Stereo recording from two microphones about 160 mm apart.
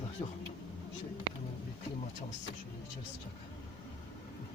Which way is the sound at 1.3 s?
25° left (ahead or behind).